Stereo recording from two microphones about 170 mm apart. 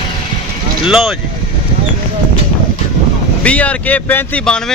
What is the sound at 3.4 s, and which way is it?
Speech, 10° left (ahead or behind).